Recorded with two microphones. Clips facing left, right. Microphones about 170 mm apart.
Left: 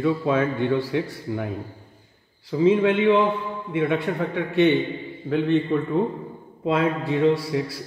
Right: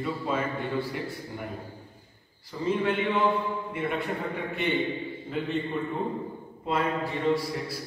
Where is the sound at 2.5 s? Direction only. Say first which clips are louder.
Left 9 dB; 90° left; by 5.6 s 75° left (ahead or behind).